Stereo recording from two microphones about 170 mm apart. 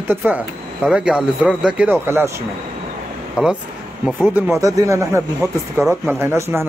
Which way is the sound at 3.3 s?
5° right (ahead or behind).